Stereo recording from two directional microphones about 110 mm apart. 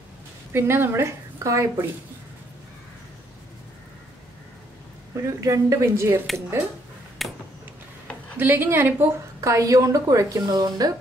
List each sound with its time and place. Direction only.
0.5 s a woman's voice: 20° right (ahead or behind)
5.1 s speech: 30° right (ahead or behind)
7.2 s a sound: centre (ahead or behind)
8.4 s speech: 20° right (ahead or behind)
9.4 s a woman's voice: 30° right (ahead or behind)